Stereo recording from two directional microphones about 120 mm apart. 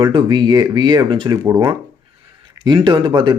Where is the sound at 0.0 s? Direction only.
35° right (ahead or behind).